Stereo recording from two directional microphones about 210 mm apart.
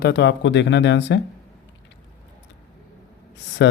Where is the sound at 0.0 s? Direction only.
55° left (ahead or behind).